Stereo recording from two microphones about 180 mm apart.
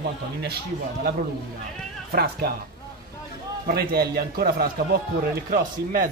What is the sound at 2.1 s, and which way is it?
Speech, 60° right (ahead or behind).